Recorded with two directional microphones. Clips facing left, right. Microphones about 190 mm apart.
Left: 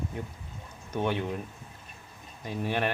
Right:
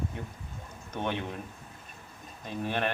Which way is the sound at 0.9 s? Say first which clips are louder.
Left 4 dB; 10° left (ahead or behind).